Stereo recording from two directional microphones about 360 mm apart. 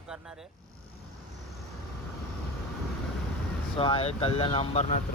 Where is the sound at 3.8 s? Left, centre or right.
Centre.